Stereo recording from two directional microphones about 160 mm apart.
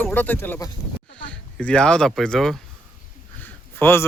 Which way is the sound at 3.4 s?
15° left (ahead or behind).